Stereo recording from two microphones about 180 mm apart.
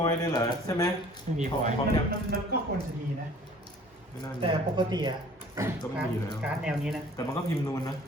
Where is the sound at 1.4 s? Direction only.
50° right (ahead or behind).